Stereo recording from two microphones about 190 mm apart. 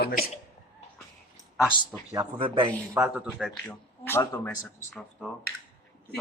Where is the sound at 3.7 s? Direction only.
10° left (ahead or behind).